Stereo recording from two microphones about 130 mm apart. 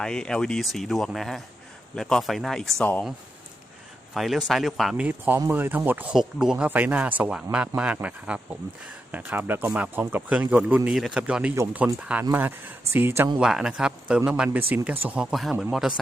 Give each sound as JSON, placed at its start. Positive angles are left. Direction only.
{"t": 0.0, "sound": "speech", "side_deg": 5}
{"t": 4.1, "sound": "speech", "side_deg": 0}
{"t": 13.4, "sound": "speech", "side_deg": -5}